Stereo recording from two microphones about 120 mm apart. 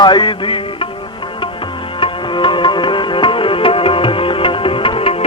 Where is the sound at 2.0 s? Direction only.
40° left (ahead or behind).